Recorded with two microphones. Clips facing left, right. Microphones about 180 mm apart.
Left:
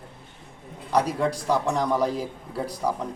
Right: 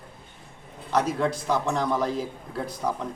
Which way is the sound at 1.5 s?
15° left (ahead or behind).